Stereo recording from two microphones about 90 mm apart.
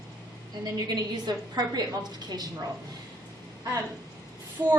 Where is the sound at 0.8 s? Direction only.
50° right (ahead or behind).